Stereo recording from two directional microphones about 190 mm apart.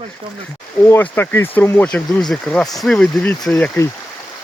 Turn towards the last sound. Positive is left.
turn(degrees=15)  # may be behind; listen again after turning